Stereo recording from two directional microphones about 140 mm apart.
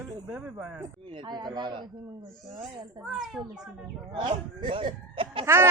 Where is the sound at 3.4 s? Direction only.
Centre (ahead or behind).